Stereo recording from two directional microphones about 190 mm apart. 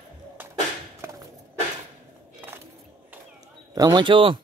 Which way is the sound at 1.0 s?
15° right (ahead or behind).